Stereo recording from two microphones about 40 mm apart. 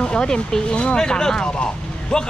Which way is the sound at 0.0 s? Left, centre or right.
Left.